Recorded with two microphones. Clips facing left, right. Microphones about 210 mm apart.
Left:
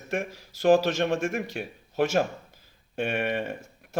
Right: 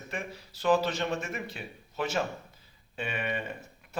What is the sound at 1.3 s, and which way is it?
Speech, 70° left (ahead or behind).